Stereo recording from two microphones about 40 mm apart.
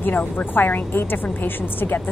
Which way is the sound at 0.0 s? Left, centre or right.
Left.